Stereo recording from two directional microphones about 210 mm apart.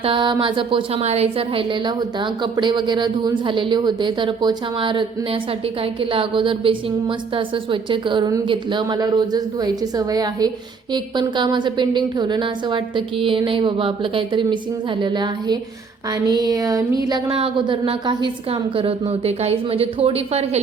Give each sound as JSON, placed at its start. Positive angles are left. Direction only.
{"t": 0.0, "sound": "a woman's voice", "side_deg": -25}